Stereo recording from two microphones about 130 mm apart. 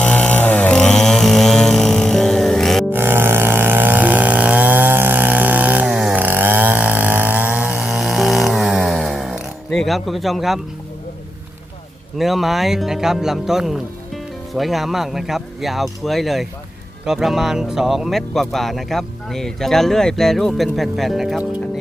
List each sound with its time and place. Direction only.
0.0 s chainsaw: 10° left (ahead or behind)
2.9 s chainsaw: 15° right (ahead or behind); by 10.6 s centre (ahead or behind)
12.1 s speech: centre (ahead or behind)